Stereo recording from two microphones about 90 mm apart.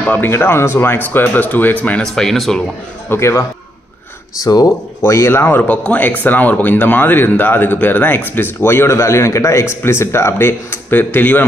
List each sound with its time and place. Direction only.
0.0 s speech: 20° left (ahead or behind); by 2.6 s centre (ahead or behind)
3.1 s speech: 30° left (ahead or behind)
4.4 s speech: 45° left (ahead or behind)
5.0 s speech: 30° left (ahead or behind)